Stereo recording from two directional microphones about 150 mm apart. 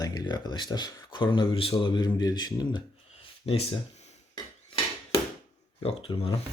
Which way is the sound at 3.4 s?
40° left (ahead or behind).